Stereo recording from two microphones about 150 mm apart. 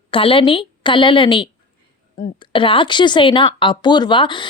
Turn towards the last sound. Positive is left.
turn(degrees=30)  # may be behind; listen again after turning